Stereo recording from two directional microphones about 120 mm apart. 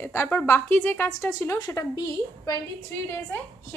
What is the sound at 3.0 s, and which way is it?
Speech, 15° left (ahead or behind).